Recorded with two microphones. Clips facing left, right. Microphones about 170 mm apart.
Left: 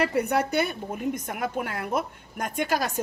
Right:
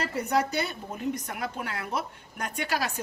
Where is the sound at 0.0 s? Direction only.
60° left (ahead or behind).